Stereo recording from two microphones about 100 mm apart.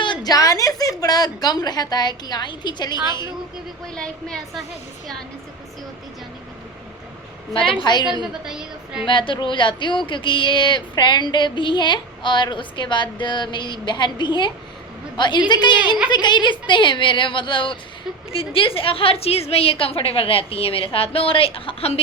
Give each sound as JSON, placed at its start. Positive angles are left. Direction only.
{"t": 0.0, "sound": "speech", "side_deg": 50}
{"t": 3.9, "sound": "a woman's voice", "side_deg": 5}
{"t": 7.5, "sound": "speech", "side_deg": 60}
{"t": 8.2, "sound": "a woman's voice", "side_deg": -5}
{"t": 9.0, "sound": "a woman's voice", "side_deg": 55}